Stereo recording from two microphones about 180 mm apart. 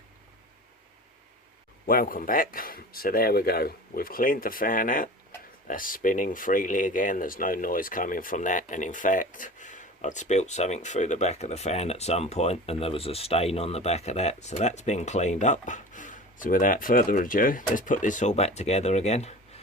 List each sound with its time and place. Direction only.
1.9 s speech: 50° left (ahead or behind); by 19.6 s 35° left (ahead or behind)